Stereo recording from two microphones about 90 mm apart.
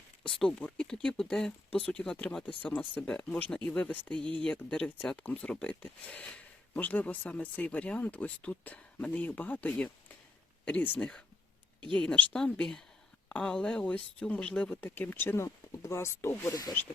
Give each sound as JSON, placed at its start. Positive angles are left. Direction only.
{"t": 0.2, "sound": "speech", "side_deg": 5}